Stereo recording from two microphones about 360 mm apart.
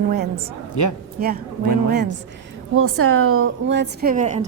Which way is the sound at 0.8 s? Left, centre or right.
Left.